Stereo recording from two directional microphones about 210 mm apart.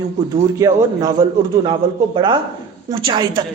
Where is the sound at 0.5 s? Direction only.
15° right (ahead or behind).